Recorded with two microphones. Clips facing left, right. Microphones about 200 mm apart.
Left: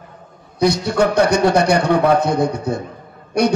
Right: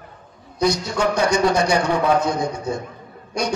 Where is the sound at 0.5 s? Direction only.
60° left (ahead or behind).